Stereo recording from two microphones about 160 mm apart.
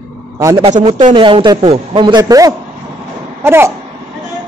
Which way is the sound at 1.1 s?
30° right (ahead or behind).